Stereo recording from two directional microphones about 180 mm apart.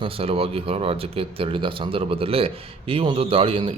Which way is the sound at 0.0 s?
30° right (ahead or behind).